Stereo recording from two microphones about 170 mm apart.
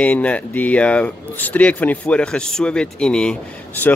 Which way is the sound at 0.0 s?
10° left (ahead or behind).